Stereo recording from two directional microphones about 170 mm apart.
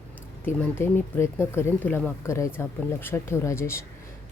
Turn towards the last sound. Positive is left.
turn(degrees=15)  # may be behind; listen again after turning